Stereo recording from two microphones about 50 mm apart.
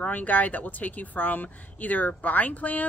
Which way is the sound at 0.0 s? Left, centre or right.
Left.